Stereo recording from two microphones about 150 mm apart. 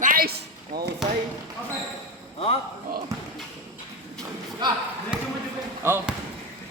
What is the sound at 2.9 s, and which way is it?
Speech, 80° right.